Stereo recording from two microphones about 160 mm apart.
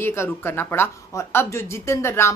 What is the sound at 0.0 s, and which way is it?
Speech, 15° left (ahead or behind).